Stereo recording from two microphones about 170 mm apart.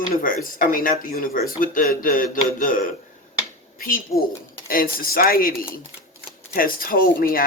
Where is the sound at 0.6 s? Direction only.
55° left (ahead or behind).